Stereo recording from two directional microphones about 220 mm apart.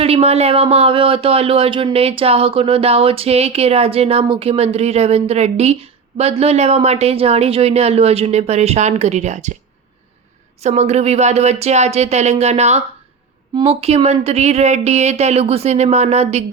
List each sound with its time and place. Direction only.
0.0 s speech: 25° right (ahead or behind)
10.6 s speech: 30° right (ahead or behind)